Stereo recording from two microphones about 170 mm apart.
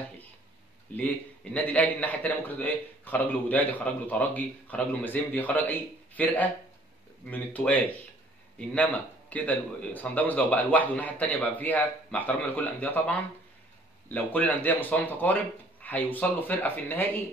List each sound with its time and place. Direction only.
0.9 s a man's voice: 10° left (ahead or behind)
9.3 s a man's voice: 10° left (ahead or behind)